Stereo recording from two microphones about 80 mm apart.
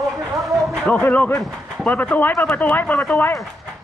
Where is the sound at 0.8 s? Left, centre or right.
Centre.